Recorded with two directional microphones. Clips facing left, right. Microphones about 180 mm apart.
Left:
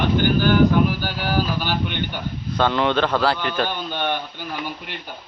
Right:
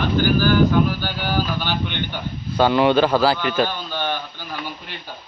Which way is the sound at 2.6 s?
10° right (ahead or behind).